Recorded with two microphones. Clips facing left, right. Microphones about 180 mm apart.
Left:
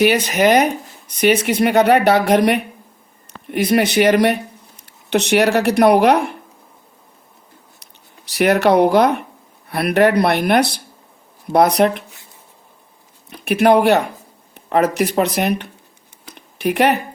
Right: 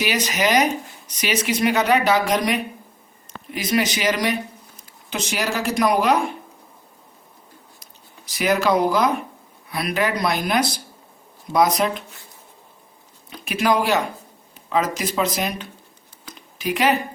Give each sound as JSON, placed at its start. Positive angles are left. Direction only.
{"t": 0.0, "sound": "speech", "side_deg": 55}
{"t": 7.8, "sound": "speech", "side_deg": 70}
{"t": 13.4, "sound": "speech", "side_deg": 60}
{"t": 16.3, "sound": "a sound", "side_deg": 65}